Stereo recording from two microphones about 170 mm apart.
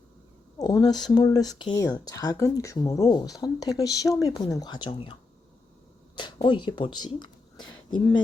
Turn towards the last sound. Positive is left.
turn(degrees=25)  # may be behind; listen again after turning